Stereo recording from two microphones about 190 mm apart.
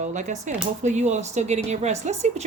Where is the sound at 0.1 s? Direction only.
40° right (ahead or behind).